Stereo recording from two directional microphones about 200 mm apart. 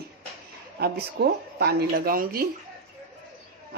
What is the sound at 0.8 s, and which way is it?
Speech, 55° right (ahead or behind).